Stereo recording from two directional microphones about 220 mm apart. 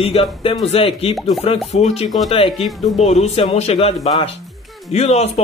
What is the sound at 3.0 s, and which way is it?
Speech, 30° left (ahead or behind).